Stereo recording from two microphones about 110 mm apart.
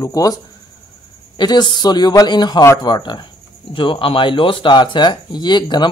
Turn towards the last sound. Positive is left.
turn(degrees=40)  # may be behind; listen again after turning